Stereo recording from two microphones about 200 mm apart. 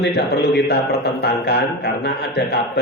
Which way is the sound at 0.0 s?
55° left (ahead or behind).